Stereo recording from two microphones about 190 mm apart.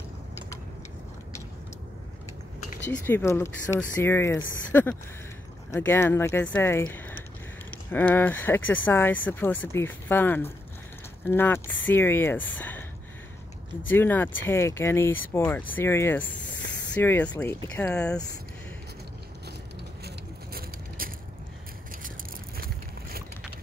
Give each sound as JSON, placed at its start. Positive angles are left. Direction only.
{"t": 3.1, "sound": "speech", "side_deg": 15}
{"t": 12.5, "sound": "a sound", "side_deg": 10}
{"t": 13.8, "sound": "speech", "side_deg": 10}
{"t": 20.1, "sound": "vehicle", "side_deg": -50}